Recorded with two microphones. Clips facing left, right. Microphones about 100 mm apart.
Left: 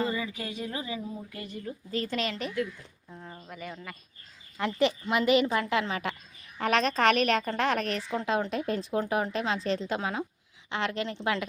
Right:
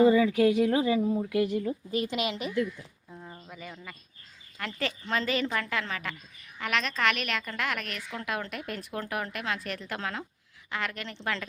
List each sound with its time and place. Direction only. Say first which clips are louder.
0.3 s speech: right 13 dB; 75° right (ahead or behind)
1.9 s a woman's voice: left 2 dB; 15° right (ahead or behind)
3.1 s a sound: left 2 dB; centre (ahead or behind)
4.5 s a woman's voice: left 7 dB; 20° left (ahead or behind)
6.6 s a woman's voice: left 4 dB; 35° left (ahead or behind); by 11.4 s 15° left (ahead or behind)